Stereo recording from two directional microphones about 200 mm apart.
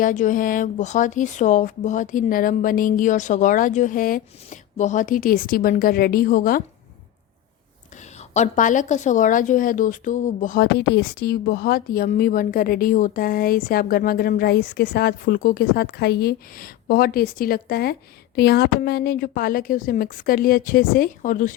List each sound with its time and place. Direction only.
0.0 s a woman's voice: 40° left (ahead or behind)
8.3 s a woman's voice: 35° left (ahead or behind)
10.8 s a woman's voice: 55° left (ahead or behind)